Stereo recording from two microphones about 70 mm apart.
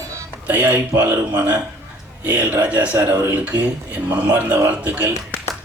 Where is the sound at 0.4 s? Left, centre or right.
Right.